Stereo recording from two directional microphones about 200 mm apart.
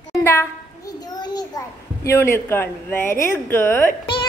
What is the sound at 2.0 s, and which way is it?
Speech, 15° left (ahead or behind).